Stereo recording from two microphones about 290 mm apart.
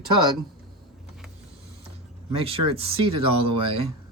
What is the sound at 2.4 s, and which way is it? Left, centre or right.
Speech, centre.